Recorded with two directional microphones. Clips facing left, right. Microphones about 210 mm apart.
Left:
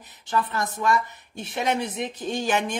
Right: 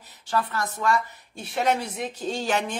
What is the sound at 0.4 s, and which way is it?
A woman's voice, 20° left (ahead or behind).